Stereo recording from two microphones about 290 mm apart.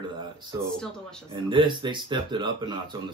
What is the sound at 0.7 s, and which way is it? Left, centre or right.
Speech, centre.